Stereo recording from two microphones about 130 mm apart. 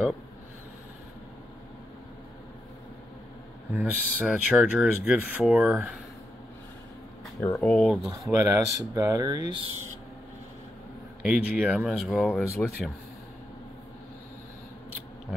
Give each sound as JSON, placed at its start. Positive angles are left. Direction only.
{"t": 3.7, "sound": "speech", "side_deg": -10}
{"t": 7.3, "sound": "speech", "side_deg": 20}
{"t": 8.3, "sound": "speech", "side_deg": -25}
{"t": 11.2, "sound": "speech", "side_deg": -10}
{"t": 12.3, "sound": "speech", "side_deg": 15}